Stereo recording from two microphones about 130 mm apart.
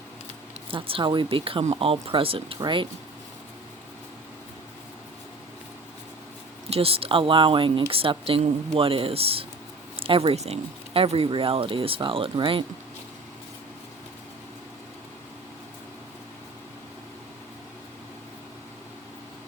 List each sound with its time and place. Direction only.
0.7 s speech: 45° right (ahead or behind)
6.7 s speech: 50° right (ahead or behind)